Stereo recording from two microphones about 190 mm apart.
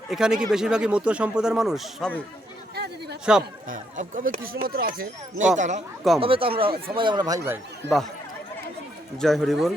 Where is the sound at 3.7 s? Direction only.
45° right (ahead or behind).